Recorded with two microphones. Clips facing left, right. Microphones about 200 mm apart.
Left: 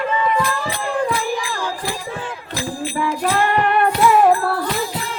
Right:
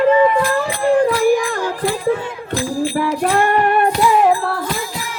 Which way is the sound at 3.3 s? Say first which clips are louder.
Right 3 dB; 50° right (ahead or behind).